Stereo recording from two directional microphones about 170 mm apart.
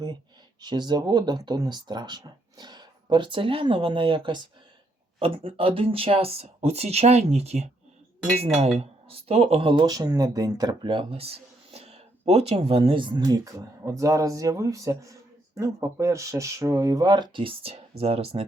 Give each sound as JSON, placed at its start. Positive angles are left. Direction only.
{"t": 0.6, "sound": "speech", "side_deg": -25}